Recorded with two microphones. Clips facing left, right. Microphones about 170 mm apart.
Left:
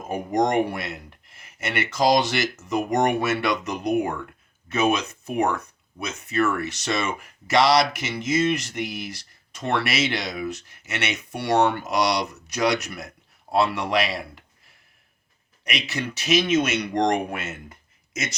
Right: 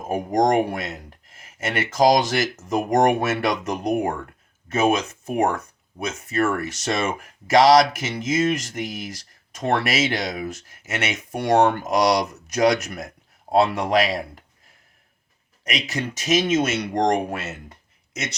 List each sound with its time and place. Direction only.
0.0 s speech: 45° right (ahead or behind)
15.6 s speech: 45° right (ahead or behind)
17.7 s a sound: 35° right (ahead or behind)